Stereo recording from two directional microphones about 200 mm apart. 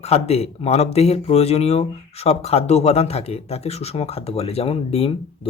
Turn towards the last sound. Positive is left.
turn(degrees=30)  # may be behind; listen again after turning